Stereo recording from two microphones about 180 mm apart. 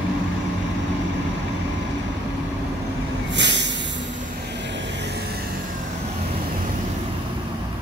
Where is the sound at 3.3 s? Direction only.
80° right.